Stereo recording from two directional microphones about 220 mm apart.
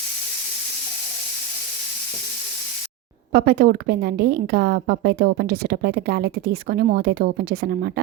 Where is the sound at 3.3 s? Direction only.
45° right (ahead or behind).